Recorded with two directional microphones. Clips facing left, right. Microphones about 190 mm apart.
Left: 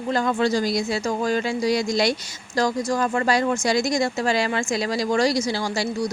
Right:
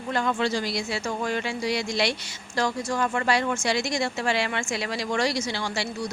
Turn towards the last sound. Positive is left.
turn(degrees=40)  # may be behind; listen again after turning